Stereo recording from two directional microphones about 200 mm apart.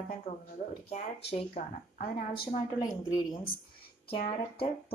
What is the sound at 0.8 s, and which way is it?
Speech, 30° left (ahead or behind).